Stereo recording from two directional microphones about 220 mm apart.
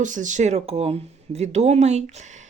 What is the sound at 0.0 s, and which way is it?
Speech, 35° right (ahead or behind).